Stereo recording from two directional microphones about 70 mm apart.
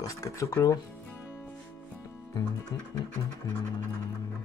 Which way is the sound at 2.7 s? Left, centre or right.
Left.